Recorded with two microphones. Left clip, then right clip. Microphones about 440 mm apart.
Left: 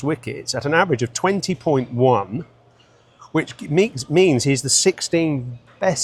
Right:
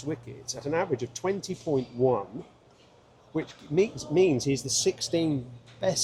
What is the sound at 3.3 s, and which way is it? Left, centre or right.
Speech, left.